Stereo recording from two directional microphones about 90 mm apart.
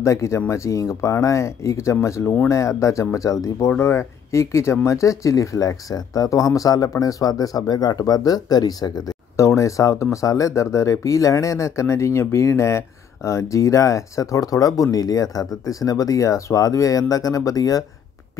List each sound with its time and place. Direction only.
0.0 s speech: 35° left (ahead or behind)
9.4 s speech: 35° left (ahead or behind)